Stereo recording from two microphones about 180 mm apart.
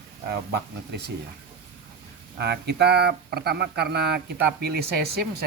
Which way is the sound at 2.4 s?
65° right (ahead or behind).